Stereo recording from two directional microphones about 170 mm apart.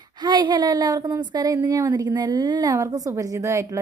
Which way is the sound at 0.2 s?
25° right (ahead or behind).